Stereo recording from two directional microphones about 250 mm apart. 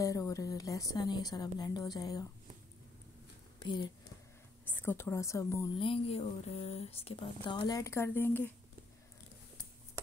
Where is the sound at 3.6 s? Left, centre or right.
Centre.